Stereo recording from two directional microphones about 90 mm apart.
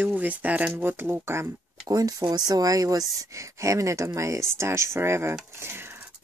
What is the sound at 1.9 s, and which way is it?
Speech, 40° right (ahead or behind).